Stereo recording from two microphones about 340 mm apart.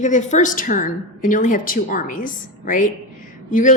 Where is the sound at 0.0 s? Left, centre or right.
Left.